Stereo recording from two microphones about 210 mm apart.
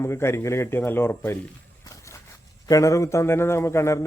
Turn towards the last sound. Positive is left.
turn(degrees=15)  # may be behind; listen again after turning